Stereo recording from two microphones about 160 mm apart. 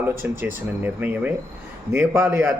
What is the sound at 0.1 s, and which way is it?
Speech, 15° right (ahead or behind).